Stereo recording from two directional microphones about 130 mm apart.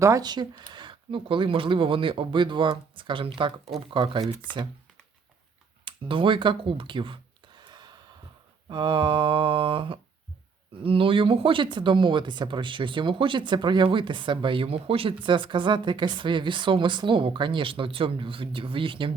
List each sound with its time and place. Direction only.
0.0 s speech: 25° right (ahead or behind)
5.8 s a sound: 40° right (ahead or behind)
8.7 s speech: 40° right (ahead or behind)